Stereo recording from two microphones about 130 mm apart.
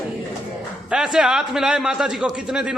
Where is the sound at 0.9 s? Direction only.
5° right (ahead or behind).